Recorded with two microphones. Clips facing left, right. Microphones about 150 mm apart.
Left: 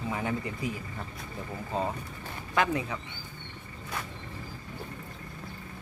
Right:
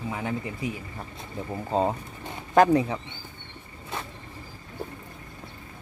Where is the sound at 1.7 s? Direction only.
30° right (ahead or behind).